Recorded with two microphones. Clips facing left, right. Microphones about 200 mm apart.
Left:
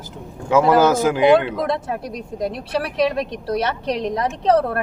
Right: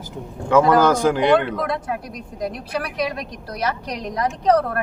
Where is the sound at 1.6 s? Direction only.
25° left (ahead or behind).